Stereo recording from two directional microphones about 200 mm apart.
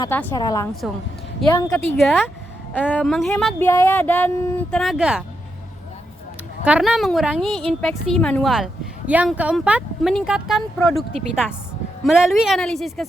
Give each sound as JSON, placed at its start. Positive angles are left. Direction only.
{"t": 0.0, "sound": "speech", "side_deg": 10}
{"t": 1.7, "sound": "a woman's voice", "side_deg": 0}
{"t": 6.7, "sound": "a woman's voice", "side_deg": -5}